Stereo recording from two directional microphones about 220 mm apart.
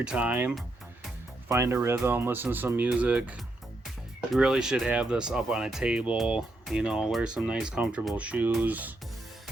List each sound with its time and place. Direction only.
0.0 s speech: 5° right (ahead or behind)